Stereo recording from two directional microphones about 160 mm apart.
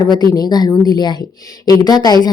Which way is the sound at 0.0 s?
25° left (ahead or behind).